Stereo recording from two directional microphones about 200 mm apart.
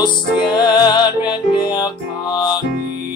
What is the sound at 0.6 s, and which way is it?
Music, 20° left (ahead or behind).